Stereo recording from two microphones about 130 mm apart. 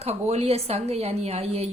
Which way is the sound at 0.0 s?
55° right (ahead or behind).